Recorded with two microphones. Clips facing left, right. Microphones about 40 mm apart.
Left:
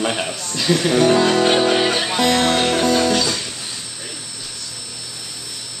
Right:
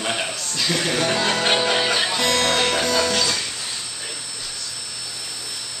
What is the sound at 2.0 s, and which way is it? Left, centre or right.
Music, centre.